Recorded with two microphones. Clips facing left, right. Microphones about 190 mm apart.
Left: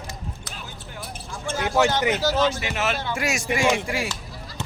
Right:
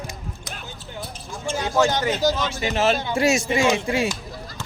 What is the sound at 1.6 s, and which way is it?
Speech, 15° left (ahead or behind).